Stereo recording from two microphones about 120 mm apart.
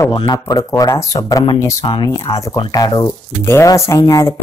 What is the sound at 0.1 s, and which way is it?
Speech, 35° left (ahead or behind).